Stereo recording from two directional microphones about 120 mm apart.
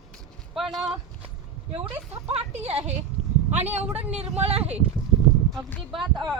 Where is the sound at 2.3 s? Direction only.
60° right (ahead or behind).